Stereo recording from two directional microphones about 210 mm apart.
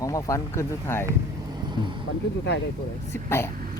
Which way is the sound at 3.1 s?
10° left (ahead or behind).